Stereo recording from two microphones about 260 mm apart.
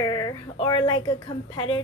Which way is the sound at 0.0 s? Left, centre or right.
Centre.